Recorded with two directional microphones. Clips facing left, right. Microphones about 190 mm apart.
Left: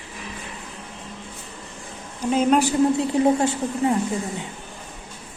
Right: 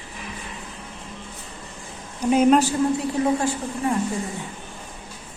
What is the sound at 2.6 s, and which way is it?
A woman's voice, 25° left (ahead or behind).